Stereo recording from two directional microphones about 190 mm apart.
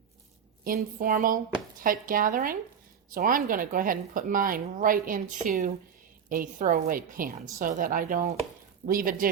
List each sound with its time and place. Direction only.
0.9 s a woman's voice: 45° right (ahead or behind)